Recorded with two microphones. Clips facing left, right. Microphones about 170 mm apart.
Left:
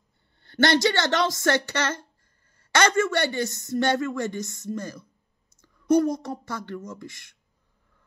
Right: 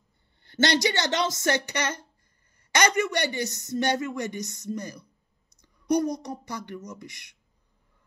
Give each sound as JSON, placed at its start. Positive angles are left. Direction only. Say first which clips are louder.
{"t": 0.7, "sound": "a woman's voice", "louder": "left 3 dB", "side_deg": -20}
{"t": 5.6, "sound": "a sound", "louder": "left 4 dB", "side_deg": -15}
{"t": 6.1, "sound": "speech", "louder": "left 2 dB", "side_deg": -15}